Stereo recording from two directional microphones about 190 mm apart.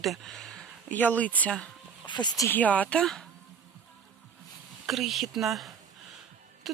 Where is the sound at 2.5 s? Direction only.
10° left (ahead or behind).